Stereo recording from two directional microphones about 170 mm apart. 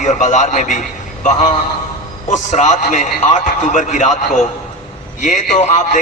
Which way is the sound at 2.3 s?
45° left (ahead or behind).